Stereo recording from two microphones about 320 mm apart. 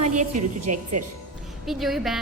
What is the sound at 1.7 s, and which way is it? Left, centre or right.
Speech, centre.